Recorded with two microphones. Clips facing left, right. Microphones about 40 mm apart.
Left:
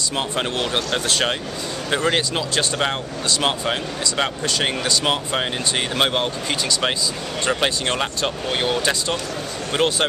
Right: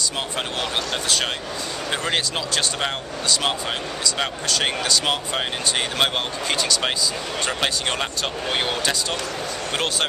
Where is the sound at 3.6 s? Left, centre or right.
Centre.